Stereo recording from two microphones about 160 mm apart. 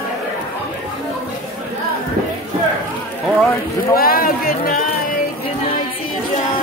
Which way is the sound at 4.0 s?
65° left (ahead or behind).